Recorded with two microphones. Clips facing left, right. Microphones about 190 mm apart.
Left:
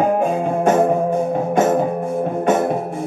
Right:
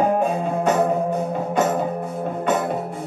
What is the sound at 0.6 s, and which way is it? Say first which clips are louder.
Music: left 4 dB; 50° left (ahead or behind).